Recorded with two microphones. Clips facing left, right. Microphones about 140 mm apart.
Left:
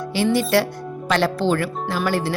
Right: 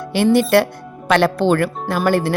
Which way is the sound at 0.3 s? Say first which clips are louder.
Right 5 dB; 55° right (ahead or behind).